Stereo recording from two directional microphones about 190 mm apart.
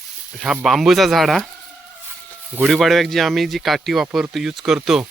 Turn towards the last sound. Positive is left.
turn(degrees=0)  # may be behind; listen again after turning